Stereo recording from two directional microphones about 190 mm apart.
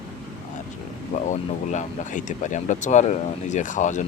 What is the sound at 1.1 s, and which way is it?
Speech, 40° left (ahead or behind).